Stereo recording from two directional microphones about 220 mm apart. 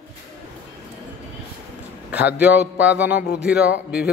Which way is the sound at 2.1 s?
5° right (ahead or behind).